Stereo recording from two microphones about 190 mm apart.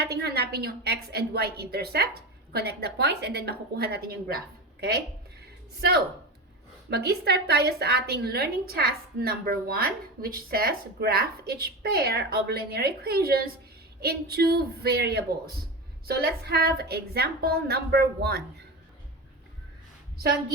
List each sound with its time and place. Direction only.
0.0 s a woman's voice: 60° right (ahead or behind)
6.9 s a woman's voice: 60° right (ahead or behind)